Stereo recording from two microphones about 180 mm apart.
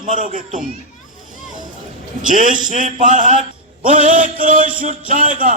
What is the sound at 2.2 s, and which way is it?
A man's voice, 45° right (ahead or behind).